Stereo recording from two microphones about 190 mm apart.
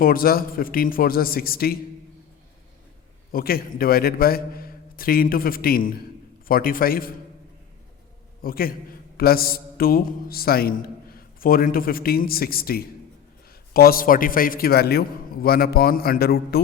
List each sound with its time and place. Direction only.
0.0 s a man's voice: 50° left (ahead or behind)
3.3 s a man's voice: 50° left (ahead or behind)
8.4 s a man's voice: 50° left (ahead or behind)